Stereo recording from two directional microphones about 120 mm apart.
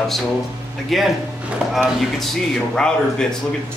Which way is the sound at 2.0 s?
Centre (ahead or behind).